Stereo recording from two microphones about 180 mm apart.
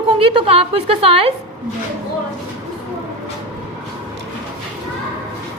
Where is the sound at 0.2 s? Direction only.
30° right (ahead or behind).